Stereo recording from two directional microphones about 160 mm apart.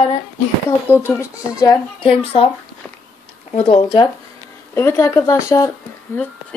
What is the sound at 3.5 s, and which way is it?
Speech, 40° left (ahead or behind).